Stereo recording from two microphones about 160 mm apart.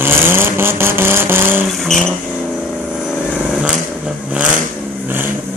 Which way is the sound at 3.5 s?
5° right (ahead or behind).